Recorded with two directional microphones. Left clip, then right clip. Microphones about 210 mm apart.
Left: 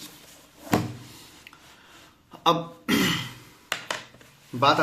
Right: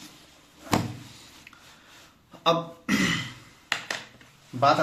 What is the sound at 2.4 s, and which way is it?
Burping, 35° left (ahead or behind).